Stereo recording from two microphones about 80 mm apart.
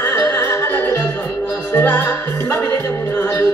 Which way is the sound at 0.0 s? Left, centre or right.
Left.